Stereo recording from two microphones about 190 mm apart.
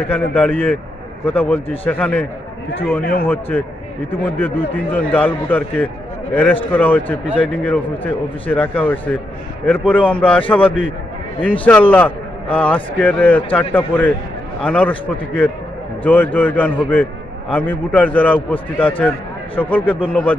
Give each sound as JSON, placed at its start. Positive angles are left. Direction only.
{"t": 0.1, "sound": "a man's voice", "side_deg": 10}
{"t": 3.0, "sound": "a man's voice", "side_deg": 50}
{"t": 3.3, "sound": "a man's voice", "side_deg": 10}